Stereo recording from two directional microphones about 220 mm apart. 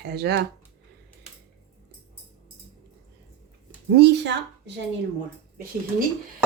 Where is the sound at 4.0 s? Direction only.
50° right (ahead or behind).